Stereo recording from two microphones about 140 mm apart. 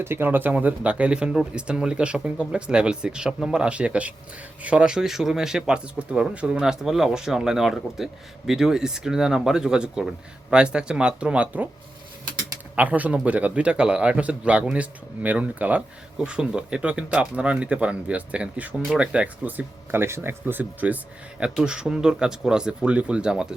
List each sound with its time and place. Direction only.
0.0 s speech: 15° right (ahead or behind)
12.7 s speech: 10° right (ahead or behind)